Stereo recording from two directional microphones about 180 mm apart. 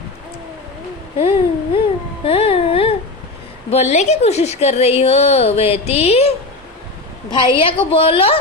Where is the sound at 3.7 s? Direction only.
40° left (ahead or behind).